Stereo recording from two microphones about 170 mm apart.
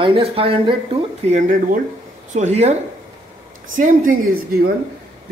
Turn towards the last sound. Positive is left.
turn(degrees=-60)  # may be behind; listen again after turning